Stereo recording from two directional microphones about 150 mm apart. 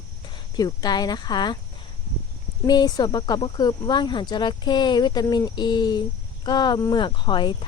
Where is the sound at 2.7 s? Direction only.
25° left (ahead or behind).